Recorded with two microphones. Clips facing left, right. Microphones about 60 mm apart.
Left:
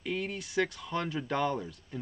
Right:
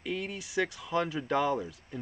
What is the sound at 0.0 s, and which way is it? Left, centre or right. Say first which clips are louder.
Speech: left 1 dB; centre.